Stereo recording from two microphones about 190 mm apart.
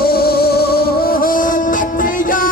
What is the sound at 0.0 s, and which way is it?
Music, 55° left (ahead or behind).